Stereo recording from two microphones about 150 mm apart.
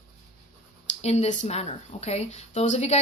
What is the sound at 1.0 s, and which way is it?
Speech, 50° left (ahead or behind).